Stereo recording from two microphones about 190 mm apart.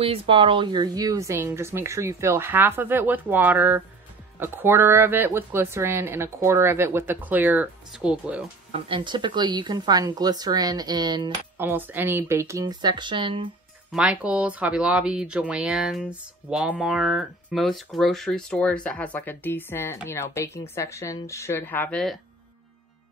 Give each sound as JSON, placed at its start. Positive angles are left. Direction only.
{"t": 0.0, "sound": "speech", "side_deg": -30}
{"t": 8.7, "sound": "speech", "side_deg": -25}
{"t": 11.5, "sound": "speech", "side_deg": -10}
{"t": 13.9, "sound": "a woman's voice", "side_deg": -5}